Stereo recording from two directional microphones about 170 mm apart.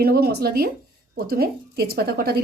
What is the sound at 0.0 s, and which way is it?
Speech, 65° right (ahead or behind).